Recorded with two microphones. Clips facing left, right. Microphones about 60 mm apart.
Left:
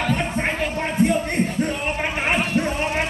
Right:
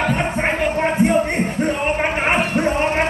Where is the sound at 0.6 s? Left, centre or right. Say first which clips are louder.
Right 4 dB; right.